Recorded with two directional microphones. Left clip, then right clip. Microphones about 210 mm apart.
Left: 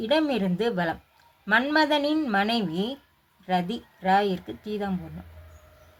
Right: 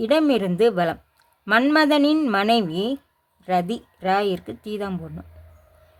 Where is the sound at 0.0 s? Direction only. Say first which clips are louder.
Right 5 dB; 40° right (ahead or behind).